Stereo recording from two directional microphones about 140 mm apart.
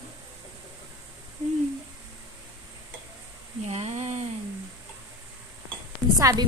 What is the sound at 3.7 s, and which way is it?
Speech, 55° right (ahead or behind).